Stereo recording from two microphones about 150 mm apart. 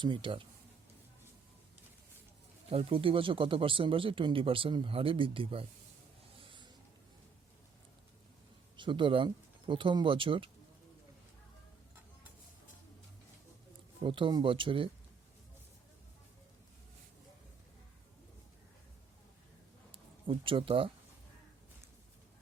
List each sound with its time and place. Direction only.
0.0 s speech: 35° right (ahead or behind)
2.6 s speech: 40° right (ahead or behind)
6.5 s a sound: 30° right (ahead or behind)
8.7 s speech: 35° right (ahead or behind)
14.0 s speech: 35° right (ahead or behind)
19.9 s speech: 35° right (ahead or behind)